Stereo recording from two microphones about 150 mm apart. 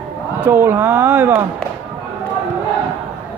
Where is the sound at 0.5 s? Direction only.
15° right (ahead or behind).